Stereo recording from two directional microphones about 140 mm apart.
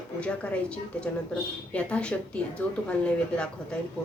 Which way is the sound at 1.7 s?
10° left (ahead or behind).